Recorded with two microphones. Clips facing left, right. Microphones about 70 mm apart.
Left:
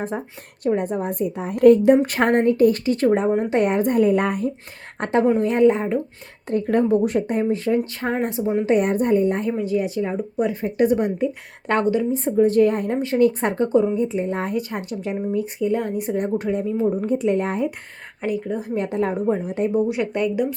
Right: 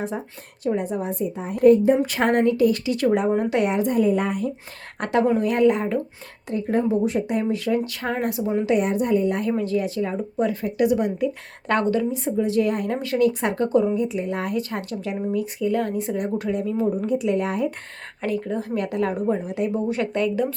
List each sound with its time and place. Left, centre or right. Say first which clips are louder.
0.7 s a woman's voice: left 2 dB; left
2.0 s a woman's voice: left 2 dB; left
4.9 s speech: left 2 dB; left
6.5 s speech: left 3 dB; left
8.7 s speech: left 3 dB; left
9.5 s speech: left 1 dB; centre
10.8 s speech: left 2 dB; left
11.7 s speech: left 1 dB; left
12.1 s speech: left 5 dB; left
18.2 s speech: left 1 dB; centre
18.7 s speech: left 2 dB; left
19.7 s speech: left 3 dB; centre